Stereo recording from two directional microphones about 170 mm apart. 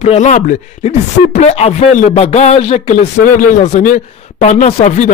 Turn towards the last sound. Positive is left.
turn(degrees=45)  # may be behind; listen again after turning